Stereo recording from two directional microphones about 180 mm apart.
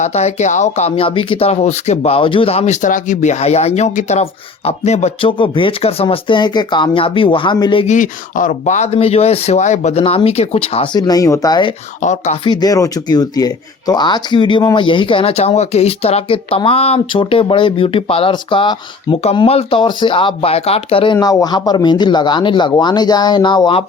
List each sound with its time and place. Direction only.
0.0 s speech: 35° left (ahead or behind)
7.9 s speech: 45° left (ahead or behind); by 11.7 s 20° left (ahead or behind)
12.0 s speech: 40° left (ahead or behind)
12.5 s speech: 20° left (ahead or behind)